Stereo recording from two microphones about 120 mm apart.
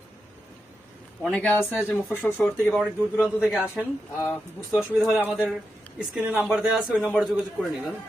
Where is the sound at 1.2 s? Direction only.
10° left (ahead or behind); by 7.0 s 5° right (ahead or behind).